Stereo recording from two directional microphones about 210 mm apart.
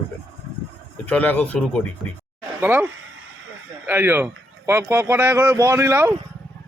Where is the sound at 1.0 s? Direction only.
5° left (ahead or behind).